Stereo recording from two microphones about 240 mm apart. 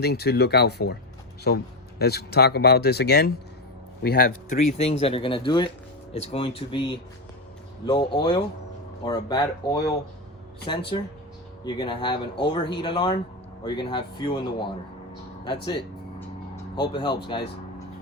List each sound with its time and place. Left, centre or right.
0.0 s speech: left
4.4 s speech: left
10.7 s speech: left